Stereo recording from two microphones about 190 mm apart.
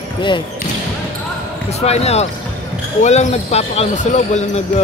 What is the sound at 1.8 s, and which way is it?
Speech, 35° left (ahead or behind).